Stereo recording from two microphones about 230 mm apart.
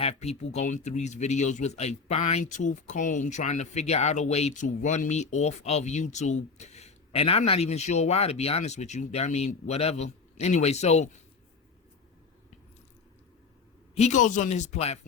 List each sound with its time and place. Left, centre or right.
0.0 s speech: left
13.9 s speech: left